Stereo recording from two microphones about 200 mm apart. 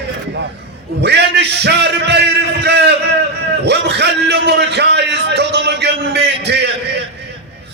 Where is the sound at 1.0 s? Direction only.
55° right (ahead or behind).